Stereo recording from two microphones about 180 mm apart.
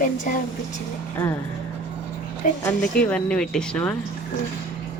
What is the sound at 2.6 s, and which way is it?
Speech, 5° left (ahead or behind).